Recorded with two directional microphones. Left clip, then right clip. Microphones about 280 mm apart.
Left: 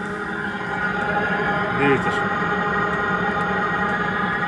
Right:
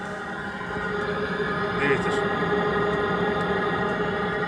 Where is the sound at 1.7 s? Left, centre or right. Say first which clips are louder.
Left 3 dB; right.